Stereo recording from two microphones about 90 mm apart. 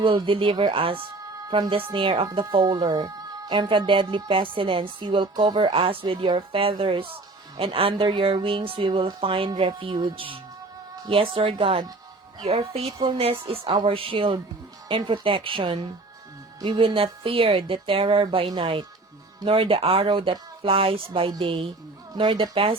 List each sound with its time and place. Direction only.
0.3 s speech: 75° right (ahead or behind)
2.5 s a woman's voice: 55° right (ahead or behind)
5.5 s a woman's voice: 75° right (ahead or behind)
9.5 s speech: 65° right (ahead or behind)
11.1 s speech: 90° right
13.1 s a woman's voice: 90° right; by 15.9 s 75° right (ahead or behind)
16.6 s speech: 60° right (ahead or behind); by 18.9 s 75° right (ahead or behind)
19.5 s a woman's voice: 90° right
22.1 s speech: 50° right (ahead or behind)
22.5 s speech: 90° right